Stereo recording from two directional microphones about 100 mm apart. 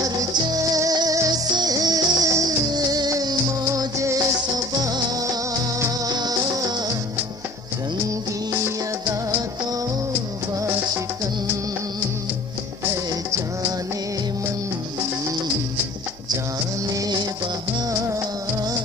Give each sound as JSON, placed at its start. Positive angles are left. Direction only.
{"t": 0.0, "sound": "music", "side_deg": -40}
{"t": 16.5, "sound": "music", "side_deg": -35}